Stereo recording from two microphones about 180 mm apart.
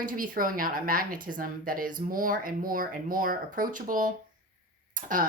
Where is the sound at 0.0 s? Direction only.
50° right (ahead or behind).